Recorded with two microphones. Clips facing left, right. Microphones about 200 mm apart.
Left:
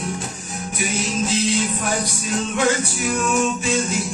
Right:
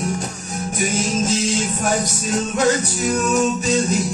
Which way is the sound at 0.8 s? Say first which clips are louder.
Right 3 dB; 40° right (ahead or behind).